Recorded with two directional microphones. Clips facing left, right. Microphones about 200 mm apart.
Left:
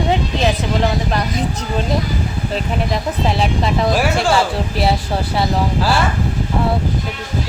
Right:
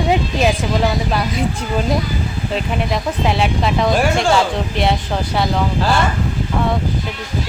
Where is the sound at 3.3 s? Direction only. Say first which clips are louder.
Right 1 dB; centre (ahead or behind).